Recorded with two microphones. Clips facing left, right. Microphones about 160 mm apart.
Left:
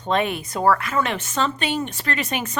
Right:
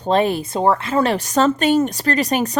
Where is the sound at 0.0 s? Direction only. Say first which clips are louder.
Right 5 dB; 35° right (ahead or behind).